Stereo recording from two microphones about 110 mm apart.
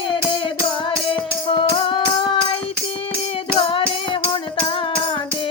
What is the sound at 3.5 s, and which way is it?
Music, 50° left (ahead or behind).